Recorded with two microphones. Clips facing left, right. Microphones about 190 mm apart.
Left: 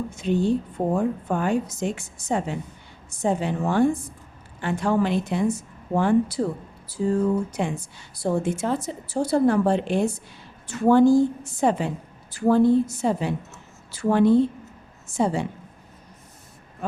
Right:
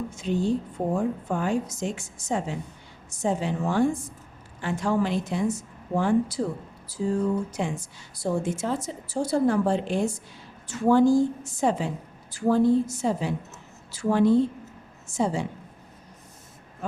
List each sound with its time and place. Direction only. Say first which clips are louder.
0.1 s a woman's voice: left 4 dB; 60° left (ahead or behind)